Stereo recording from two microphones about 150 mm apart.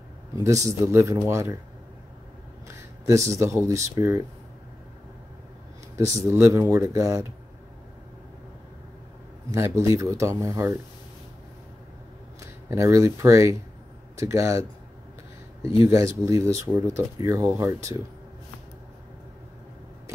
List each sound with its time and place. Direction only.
0.4 s speech: 20° right (ahead or behind)
2.7 s speech: 20° right (ahead or behind)
6.3 s speech: 20° right (ahead or behind)
9.5 s speech: 20° right (ahead or behind)
12.4 s speech: 20° right (ahead or behind)
15.9 s speech: 20° right (ahead or behind)